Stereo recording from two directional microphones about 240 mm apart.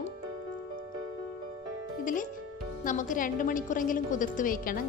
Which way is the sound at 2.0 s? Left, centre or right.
Left.